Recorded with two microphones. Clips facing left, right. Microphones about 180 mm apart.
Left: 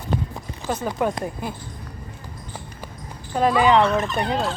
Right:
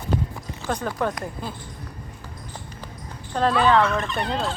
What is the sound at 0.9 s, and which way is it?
Speech, 20° left (ahead or behind).